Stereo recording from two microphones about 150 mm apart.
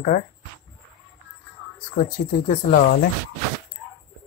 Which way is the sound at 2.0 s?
55° left (ahead or behind).